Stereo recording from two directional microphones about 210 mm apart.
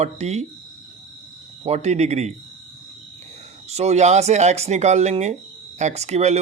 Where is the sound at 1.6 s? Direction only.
30° right (ahead or behind).